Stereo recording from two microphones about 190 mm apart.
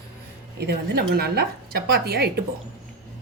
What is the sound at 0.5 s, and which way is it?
A woman's voice, 55° right (ahead or behind).